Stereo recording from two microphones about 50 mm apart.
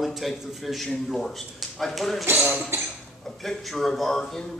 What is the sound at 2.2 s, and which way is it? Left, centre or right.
Speech, right.